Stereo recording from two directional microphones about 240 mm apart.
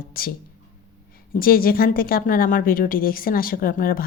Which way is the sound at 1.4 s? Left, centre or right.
Left.